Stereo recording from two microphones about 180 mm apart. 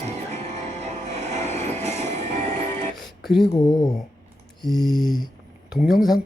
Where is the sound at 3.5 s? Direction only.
20° left (ahead or behind).